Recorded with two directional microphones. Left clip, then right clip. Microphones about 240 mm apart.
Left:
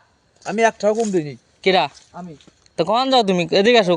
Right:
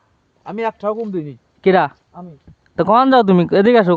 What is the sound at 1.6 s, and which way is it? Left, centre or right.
Speech, centre.